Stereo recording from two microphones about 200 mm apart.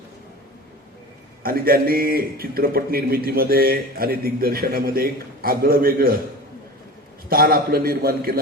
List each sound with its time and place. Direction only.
1.5 s a man's voice: 45° right (ahead or behind)
7.3 s a man's voice: 45° right (ahead or behind)